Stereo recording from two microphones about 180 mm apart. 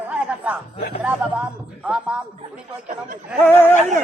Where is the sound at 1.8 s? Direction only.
5° right (ahead or behind).